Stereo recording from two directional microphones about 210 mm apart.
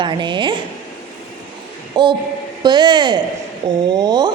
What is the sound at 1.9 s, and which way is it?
A woman's voice, 20° right (ahead or behind).